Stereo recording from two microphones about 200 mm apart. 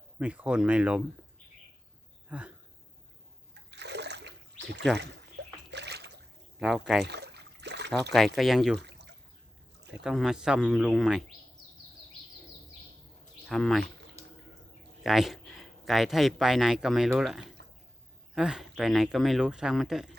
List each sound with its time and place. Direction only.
0.2 s speech: 5° right (ahead or behind)
2.3 s a sound: 5° right (ahead or behind)
3.7 s trickle: 60° right (ahead or behind)
5.4 s splash: 55° right (ahead or behind)
6.6 s speech: centre (ahead or behind)
7.0 s trickle: 55° right (ahead or behind)
8.4 s speech: centre (ahead or behind)
10.0 s speech: 5° right (ahead or behind)
13.5 s speech: centre (ahead or behind)
15.0 s speech: centre (ahead or behind)